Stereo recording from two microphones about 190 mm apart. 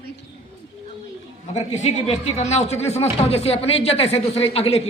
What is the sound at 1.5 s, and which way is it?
Speech, 35° left (ahead or behind).